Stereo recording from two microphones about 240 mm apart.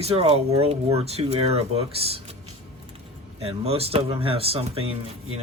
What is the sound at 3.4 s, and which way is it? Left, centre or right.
Speech, right.